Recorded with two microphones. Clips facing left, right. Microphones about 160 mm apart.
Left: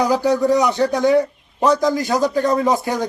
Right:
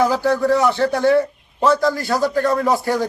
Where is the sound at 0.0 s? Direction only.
15° left (ahead or behind).